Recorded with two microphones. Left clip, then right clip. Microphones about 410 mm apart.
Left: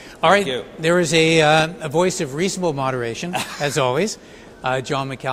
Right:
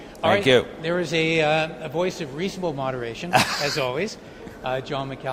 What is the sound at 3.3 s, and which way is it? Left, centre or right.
Speech, right.